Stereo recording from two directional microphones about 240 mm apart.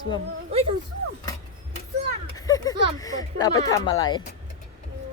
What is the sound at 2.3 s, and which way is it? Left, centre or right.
Speech, centre.